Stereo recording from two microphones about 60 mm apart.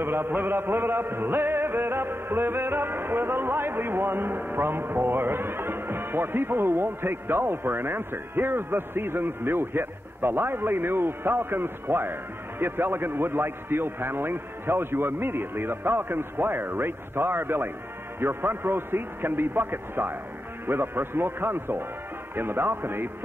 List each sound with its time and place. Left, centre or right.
0.0 s music: right